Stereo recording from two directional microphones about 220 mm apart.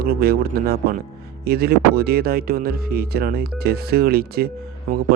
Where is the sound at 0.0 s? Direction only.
45° right (ahead or behind).